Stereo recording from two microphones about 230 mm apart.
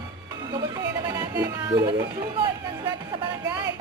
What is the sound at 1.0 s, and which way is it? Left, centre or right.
Speech, centre.